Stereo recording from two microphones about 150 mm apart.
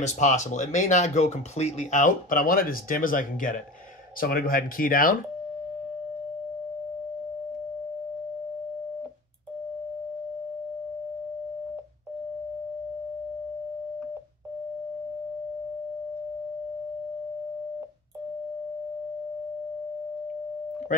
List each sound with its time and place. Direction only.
0.0 s speech: 55° left (ahead or behind)
4.2 s speech: 80° left